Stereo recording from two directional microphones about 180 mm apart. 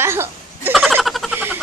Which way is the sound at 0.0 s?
15° right (ahead or behind).